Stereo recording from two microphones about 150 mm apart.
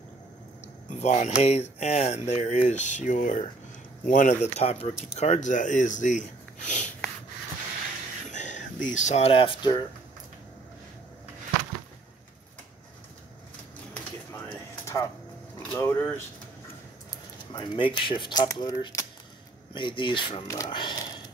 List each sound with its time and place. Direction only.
0.8 s speech: 50° left (ahead or behind)
8.3 s speech: 55° left (ahead or behind); by 9.8 s 35° left (ahead or behind)
14.3 s a sound: 20° left (ahead or behind)
15.7 s speech: 15° left (ahead or behind)
17.5 s speech: 30° left (ahead or behind)